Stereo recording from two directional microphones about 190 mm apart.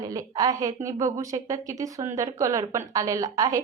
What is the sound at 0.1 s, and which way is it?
A woman's voice, 20° right (ahead or behind).